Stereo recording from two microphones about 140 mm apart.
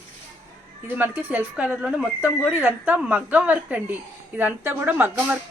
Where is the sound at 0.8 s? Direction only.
15° right (ahead or behind).